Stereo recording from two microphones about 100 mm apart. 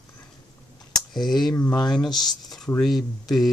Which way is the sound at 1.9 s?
5° left (ahead or behind).